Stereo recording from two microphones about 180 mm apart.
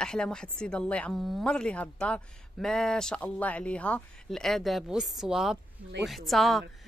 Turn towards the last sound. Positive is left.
turn(degrees=0)  # may be behind; listen again after turning